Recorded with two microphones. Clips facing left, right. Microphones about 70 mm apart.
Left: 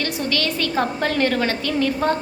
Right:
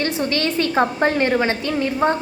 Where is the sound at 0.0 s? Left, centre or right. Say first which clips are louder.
Right 2 dB; right.